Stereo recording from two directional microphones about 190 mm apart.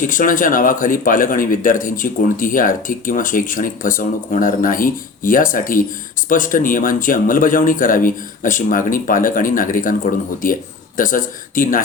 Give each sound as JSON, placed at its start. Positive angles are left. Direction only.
{"t": 0.0, "sound": "speech", "side_deg": 45}